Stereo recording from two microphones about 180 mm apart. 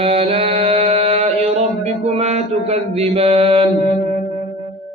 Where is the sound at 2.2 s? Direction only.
35° right (ahead or behind).